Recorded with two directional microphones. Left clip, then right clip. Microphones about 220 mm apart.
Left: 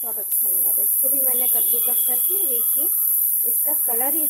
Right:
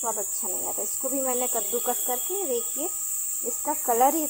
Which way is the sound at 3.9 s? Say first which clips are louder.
Right 9 dB; 15° right (ahead or behind).